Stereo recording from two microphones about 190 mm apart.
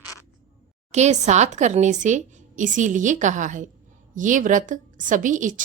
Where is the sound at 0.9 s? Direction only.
35° right (ahead or behind).